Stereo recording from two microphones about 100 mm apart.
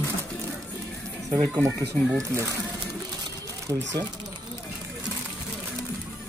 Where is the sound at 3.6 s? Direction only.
30° right (ahead or behind).